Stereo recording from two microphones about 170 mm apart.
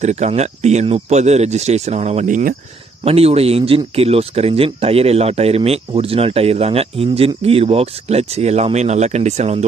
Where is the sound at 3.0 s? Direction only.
35° right (ahead or behind).